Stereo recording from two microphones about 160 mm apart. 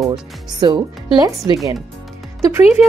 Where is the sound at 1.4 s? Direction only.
15° right (ahead or behind).